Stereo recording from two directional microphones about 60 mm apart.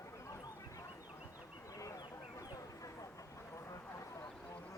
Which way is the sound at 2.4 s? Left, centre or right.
Left.